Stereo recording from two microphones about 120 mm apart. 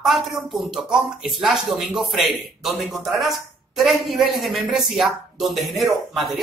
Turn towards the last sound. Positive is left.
turn(degrees=0)  # may be behind; listen again after turning